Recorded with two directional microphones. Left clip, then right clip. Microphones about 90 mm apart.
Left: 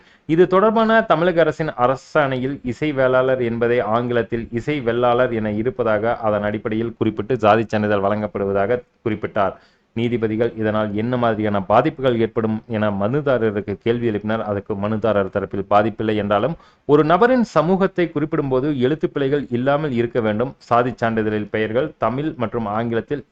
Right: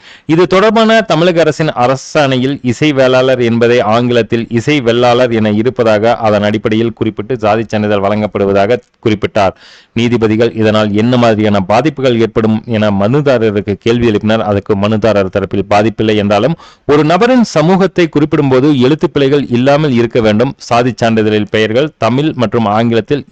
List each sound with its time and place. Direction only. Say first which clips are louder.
0.3 s a man's voice: right 7 dB; 35° right (ahead or behind)
7.0 s speech: right 4 dB; 15° right (ahead or behind)
8.3 s a man's voice: right 9 dB; 45° right (ahead or behind)